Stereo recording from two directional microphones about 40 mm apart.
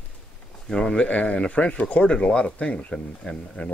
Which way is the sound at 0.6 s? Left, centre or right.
Left.